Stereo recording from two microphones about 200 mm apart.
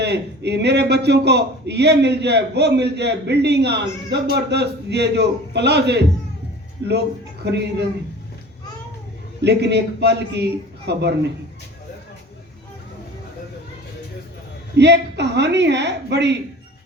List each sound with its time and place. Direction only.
0.0 s a man's voice: 55° right (ahead or behind)
7.4 s a man's voice: 55° right (ahead or behind)
9.4 s a man's voice: 55° right (ahead or behind)
14.8 s a man's voice: 60° right (ahead or behind)